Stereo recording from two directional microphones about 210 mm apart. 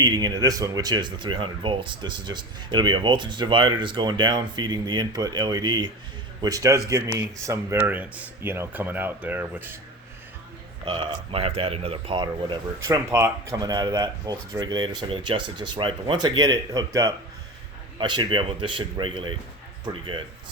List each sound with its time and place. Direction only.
0.0 s speech: 20° right (ahead or behind)
10.8 s speech: 25° right (ahead or behind)